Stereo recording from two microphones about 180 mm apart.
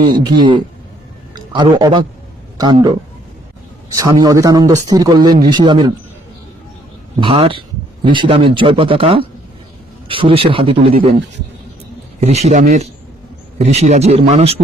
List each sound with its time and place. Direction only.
0.0 s a man's voice: 25° right (ahead or behind)
7.2 s a man's voice: 30° right (ahead or behind)
12.2 s a man's voice: 35° right (ahead or behind)